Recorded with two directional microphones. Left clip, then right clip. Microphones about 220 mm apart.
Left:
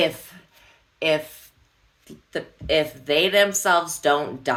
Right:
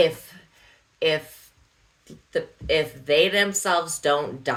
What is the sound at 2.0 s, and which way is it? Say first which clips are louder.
Speech: right 3 dB; 15° left (ahead or behind).